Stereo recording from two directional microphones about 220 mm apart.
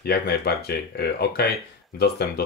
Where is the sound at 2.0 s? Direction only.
45° left (ahead or behind).